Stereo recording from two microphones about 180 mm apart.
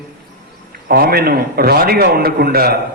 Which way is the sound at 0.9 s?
55° right (ahead or behind).